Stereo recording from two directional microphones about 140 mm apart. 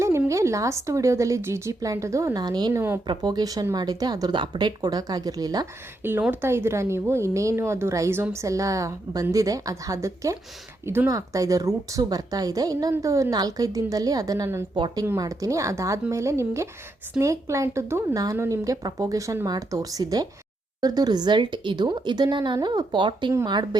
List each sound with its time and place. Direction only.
0.3 s a woman's voice: 20° right (ahead or behind)
6.0 s a woman's voice: 15° right (ahead or behind)
14.8 s a woman's voice: 35° right (ahead or behind)
15.0 s a woman's voice: 20° right (ahead or behind)